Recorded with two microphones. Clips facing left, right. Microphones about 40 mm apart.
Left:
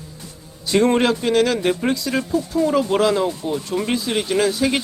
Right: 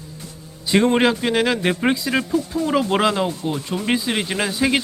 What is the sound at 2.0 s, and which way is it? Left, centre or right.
Speech, centre.